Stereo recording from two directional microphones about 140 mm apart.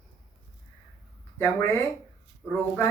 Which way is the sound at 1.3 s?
15° left (ahead or behind).